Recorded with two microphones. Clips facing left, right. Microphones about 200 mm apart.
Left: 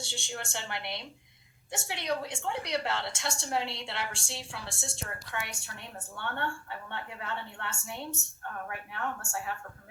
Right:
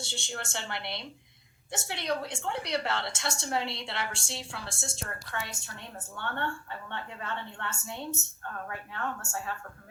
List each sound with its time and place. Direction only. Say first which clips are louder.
0.0 s a woman's voice: right 1 dB; 15° left (ahead or behind)